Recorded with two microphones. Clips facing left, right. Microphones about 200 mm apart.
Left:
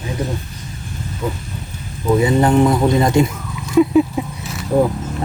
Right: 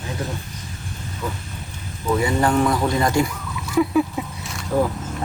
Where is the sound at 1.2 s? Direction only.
25° left (ahead or behind).